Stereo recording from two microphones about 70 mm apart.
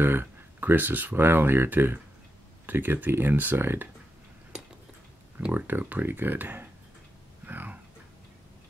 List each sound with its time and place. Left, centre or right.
0.0 s speech: right
5.5 s speech: right
7.4 s a sound: right